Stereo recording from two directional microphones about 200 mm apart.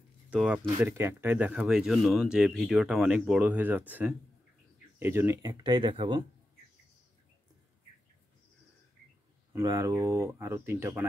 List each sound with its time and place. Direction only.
0.3 s speech: 5° right (ahead or behind); by 6.2 s 25° right (ahead or behind)
9.5 s speech: 15° right (ahead or behind)